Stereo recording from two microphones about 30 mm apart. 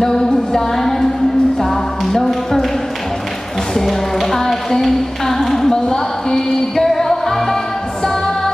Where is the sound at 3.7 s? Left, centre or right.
Centre.